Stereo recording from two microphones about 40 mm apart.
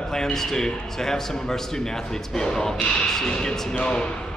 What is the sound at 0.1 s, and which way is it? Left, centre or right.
A man's voice, centre.